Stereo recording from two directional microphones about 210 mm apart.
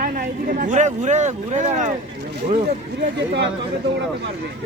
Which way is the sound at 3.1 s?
55° right (ahead or behind).